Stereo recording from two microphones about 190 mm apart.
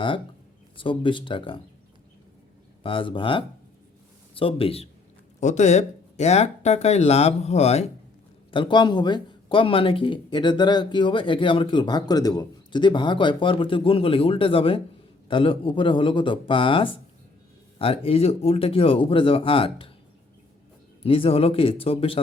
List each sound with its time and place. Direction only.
0.8 s speech: 25° left (ahead or behind)
2.8 s speech: 25° left (ahead or behind)
21.0 s speech: 30° left (ahead or behind)